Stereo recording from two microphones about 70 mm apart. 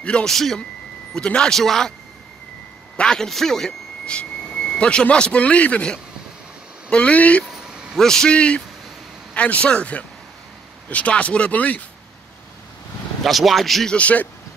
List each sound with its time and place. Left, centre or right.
0.0 s speech: centre
3.0 s speech: centre
7.4 s vehicle: centre
8.0 s speech: centre
13.2 s speech: centre
13.9 s speech: centre